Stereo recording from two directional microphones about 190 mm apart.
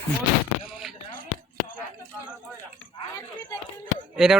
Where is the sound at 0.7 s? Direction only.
Centre (ahead or behind).